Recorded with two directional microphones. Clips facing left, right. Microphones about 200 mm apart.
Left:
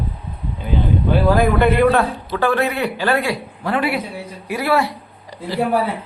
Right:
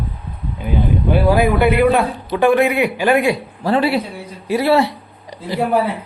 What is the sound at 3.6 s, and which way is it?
Speech, 30° right (ahead or behind).